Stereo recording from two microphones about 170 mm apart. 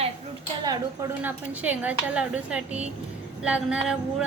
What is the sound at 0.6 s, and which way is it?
Speech, 25° right (ahead or behind).